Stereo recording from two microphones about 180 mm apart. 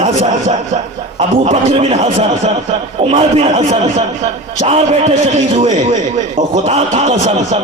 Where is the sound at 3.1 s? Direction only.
25° right (ahead or behind).